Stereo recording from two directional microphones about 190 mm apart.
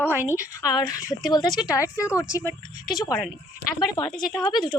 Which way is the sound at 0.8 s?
15° left (ahead or behind).